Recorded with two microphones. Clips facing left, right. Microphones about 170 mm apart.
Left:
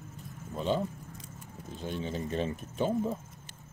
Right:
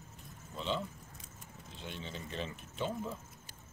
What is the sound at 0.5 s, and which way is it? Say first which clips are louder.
Speech: left 7 dB; 45° left (ahead or behind).